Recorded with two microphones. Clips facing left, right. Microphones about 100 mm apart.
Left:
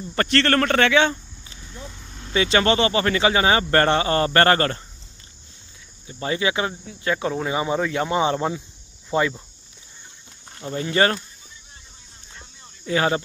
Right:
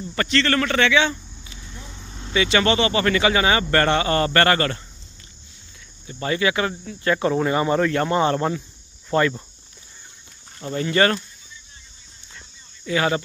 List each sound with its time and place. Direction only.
0.1 s a man's voice: 45° left (ahead or behind)
2.0 s vehicle: 5° right (ahead or behind)
2.3 s speech: 35° left (ahead or behind)
6.0 s speech: 20° left (ahead or behind)
6.8 s speech: 5° left (ahead or behind)
10.8 s speech: 25° left (ahead or behind)
12.4 s a sound: 30° left (ahead or behind)